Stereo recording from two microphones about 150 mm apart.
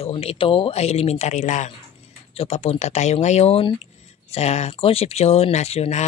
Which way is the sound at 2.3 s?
40° left (ahead or behind).